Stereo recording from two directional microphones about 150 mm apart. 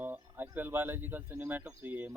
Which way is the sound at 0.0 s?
10° right (ahead or behind).